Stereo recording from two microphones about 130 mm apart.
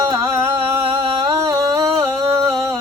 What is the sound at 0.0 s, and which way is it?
Singing, 30° right (ahead or behind).